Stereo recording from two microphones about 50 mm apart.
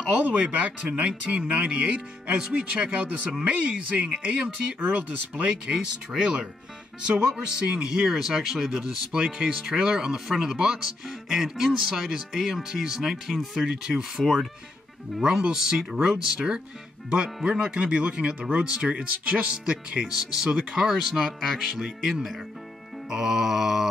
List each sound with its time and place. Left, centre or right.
0.3 s speech: right
4.7 s speech: right
5.4 s speech: centre
7.6 s speech: centre